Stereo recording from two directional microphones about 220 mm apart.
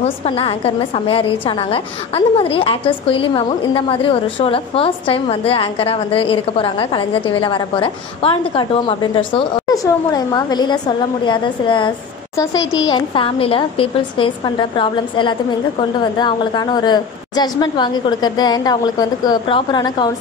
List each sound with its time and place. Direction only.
0.0 s a woman's voice: 25° left (ahead or behind)